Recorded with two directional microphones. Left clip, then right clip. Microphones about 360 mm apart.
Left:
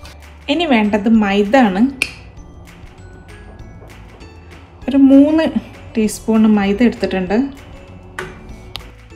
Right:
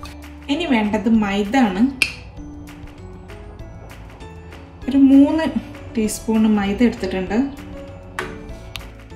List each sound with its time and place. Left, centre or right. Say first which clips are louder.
0.5 s a woman's voice: left 5 dB; left
0.9 s a woman's voice: left 5 dB; centre
4.8 s a woman's voice: left 3 dB; centre